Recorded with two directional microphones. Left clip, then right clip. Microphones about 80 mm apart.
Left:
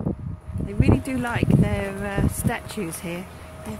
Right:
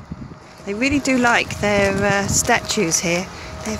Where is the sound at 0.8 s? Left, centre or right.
Centre.